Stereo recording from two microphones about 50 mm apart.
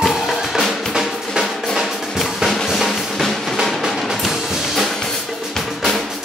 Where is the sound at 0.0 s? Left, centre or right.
Centre.